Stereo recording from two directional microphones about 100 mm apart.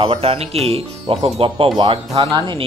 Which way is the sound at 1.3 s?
65° right (ahead or behind).